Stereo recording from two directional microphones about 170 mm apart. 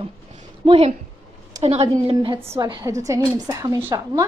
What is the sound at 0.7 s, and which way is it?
A woman's voice, 35° right (ahead or behind).